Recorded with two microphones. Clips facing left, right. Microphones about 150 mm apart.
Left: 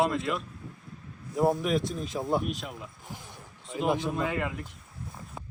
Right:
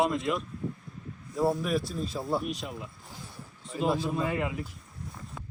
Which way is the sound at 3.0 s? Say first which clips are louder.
Left 1 dB; 20° left (ahead or behind).